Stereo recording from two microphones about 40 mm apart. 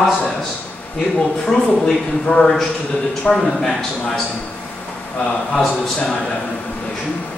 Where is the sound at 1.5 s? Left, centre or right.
Centre.